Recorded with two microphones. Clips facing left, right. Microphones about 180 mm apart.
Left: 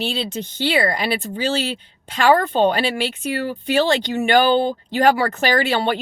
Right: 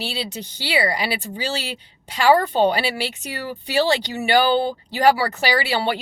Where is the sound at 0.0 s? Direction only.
10° right (ahead or behind).